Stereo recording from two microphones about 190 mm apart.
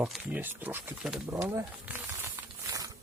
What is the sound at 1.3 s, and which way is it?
Speech, 10° right (ahead or behind).